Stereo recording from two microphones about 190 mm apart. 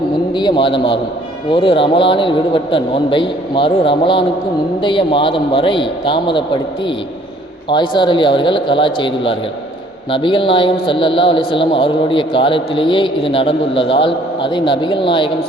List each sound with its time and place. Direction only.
0.3 s a man's voice: 25° left (ahead or behind)